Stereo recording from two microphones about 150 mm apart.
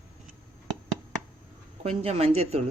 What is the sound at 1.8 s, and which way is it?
Speech, 45° right (ahead or behind).